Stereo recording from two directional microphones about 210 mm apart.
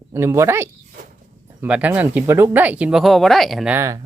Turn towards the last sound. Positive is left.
turn(degrees=-15)  # may be behind; listen again after turning